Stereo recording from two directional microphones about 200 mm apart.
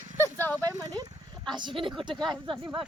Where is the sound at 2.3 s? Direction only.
25° right (ahead or behind).